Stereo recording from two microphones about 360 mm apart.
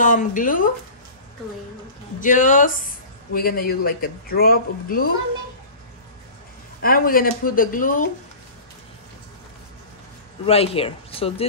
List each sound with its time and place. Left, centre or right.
0.0 s speech: left
2.1 s speech: left
6.8 s speech: left
10.4 s speech: centre